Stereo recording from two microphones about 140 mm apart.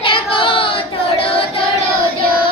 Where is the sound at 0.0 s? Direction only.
40° left (ahead or behind).